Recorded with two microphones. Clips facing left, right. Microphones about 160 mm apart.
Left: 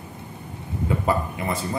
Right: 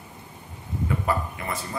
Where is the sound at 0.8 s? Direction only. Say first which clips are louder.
Left 3 dB; 20° left (ahead or behind).